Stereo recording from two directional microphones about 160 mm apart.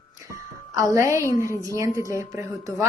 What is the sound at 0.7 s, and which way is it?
Speech, 20° right (ahead or behind).